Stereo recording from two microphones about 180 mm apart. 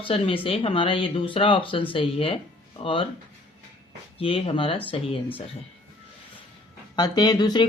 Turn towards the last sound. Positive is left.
turn(degrees=25)  # may be behind; listen again after turning